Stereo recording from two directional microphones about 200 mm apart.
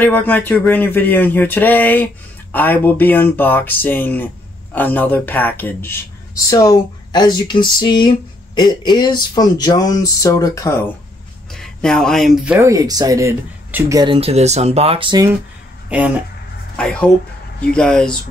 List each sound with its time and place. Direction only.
0.0 s speech: 10° left (ahead or behind)
11.5 s speech: centre (ahead or behind)
12.6 s speech: 15° right (ahead or behind)
16.7 s speech: 5° left (ahead or behind)